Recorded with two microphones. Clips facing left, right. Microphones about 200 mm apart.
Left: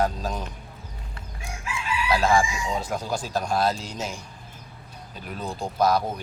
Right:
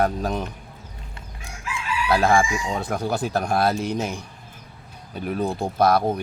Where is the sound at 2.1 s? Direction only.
60° right (ahead or behind).